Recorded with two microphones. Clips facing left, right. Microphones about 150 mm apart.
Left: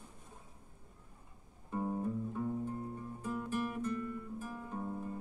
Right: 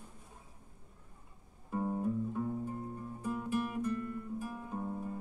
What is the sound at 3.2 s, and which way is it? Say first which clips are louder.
Guitar: right 3 dB; 10° right (ahead or behind).